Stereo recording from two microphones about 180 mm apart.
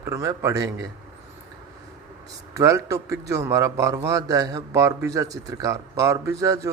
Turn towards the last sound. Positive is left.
turn(degrees=-20)  # may be behind; listen again after turning